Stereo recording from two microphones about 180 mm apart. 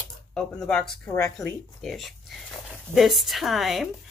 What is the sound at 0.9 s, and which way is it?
Speech, 20° left (ahead or behind).